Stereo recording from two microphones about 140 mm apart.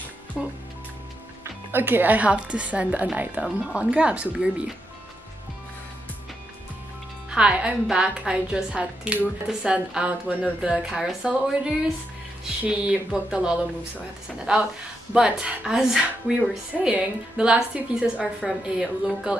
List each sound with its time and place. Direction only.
0.3 s a woman's voice: centre (ahead or behind)
1.4 s a woman's voice: 15° right (ahead or behind)
7.2 s a woman's voice: 5° right (ahead or behind)